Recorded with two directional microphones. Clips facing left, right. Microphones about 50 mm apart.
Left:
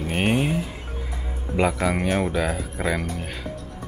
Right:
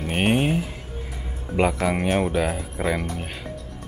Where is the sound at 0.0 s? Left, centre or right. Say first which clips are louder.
Right 1 dB; centre.